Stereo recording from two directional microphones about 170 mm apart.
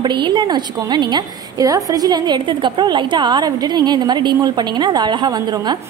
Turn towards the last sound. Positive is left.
turn(degrees=-25)  # may be behind; listen again after turning